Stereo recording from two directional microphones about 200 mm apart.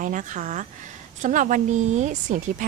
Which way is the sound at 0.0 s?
40° right (ahead or behind).